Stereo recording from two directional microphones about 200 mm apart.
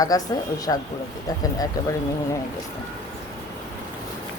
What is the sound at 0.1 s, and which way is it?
Speech, 15° left (ahead or behind).